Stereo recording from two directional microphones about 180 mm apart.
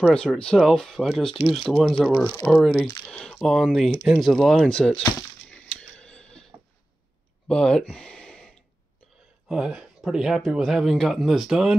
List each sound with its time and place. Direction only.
0.0 s speech: 5° left (ahead or behind)
2.1 s speech: 15° left (ahead or behind)
2.6 s speech: centre (ahead or behind)
5.5 s a sound: 5° left (ahead or behind)
7.4 s speech: 5° left (ahead or behind)
9.5 s speech: 5° right (ahead or behind)